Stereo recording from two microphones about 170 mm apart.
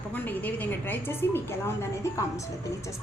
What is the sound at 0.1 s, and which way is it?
A woman's voice, 10° left (ahead or behind).